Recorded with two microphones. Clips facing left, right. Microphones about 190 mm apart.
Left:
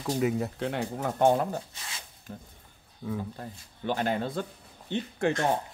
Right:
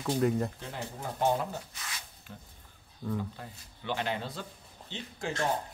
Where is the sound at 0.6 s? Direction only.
70° left (ahead or behind).